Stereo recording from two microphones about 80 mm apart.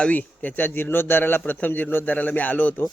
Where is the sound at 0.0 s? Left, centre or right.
Centre.